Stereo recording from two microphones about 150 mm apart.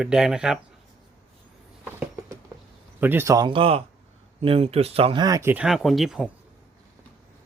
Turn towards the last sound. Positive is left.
turn(degrees=-5)  # may be behind; listen again after turning